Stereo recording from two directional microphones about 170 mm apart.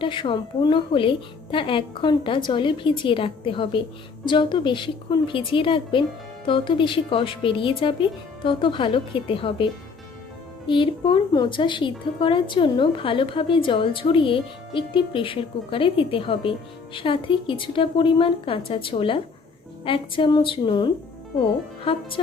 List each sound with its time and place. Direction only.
0.0 s a woman's voice: 30° left (ahead or behind)
10.7 s a woman's voice: 30° left (ahead or behind)